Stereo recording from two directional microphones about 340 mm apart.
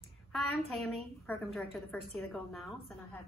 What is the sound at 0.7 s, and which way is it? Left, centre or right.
A woman's voice, centre.